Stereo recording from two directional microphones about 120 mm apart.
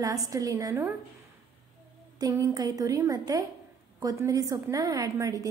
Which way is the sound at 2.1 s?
30° right (ahead or behind).